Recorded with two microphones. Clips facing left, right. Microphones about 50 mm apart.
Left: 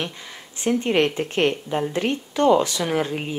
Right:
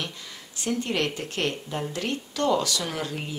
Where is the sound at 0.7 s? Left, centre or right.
Left.